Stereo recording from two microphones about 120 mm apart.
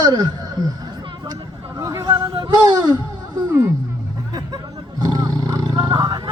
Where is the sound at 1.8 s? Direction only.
30° right (ahead or behind).